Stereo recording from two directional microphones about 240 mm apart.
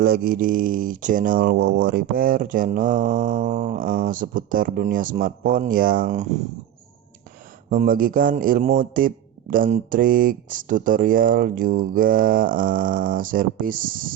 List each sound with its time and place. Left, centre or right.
0.0 s a man's voice: right
7.7 s a man's voice: right